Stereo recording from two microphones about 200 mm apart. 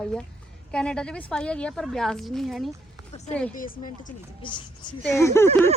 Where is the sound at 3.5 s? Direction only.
45° left (ahead or behind).